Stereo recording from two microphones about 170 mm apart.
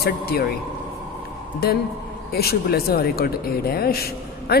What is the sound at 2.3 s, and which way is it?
A man's voice, 65° left (ahead or behind).